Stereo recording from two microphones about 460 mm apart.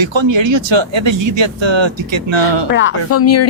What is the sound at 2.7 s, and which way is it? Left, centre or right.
Speech, left.